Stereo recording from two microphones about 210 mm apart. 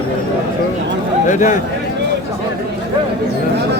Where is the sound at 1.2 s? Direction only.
35° left (ahead or behind).